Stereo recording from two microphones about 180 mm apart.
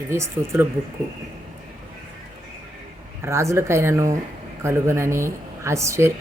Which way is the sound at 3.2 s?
15° right (ahead or behind).